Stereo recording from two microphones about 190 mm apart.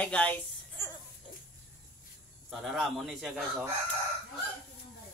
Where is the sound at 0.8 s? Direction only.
15° left (ahead or behind).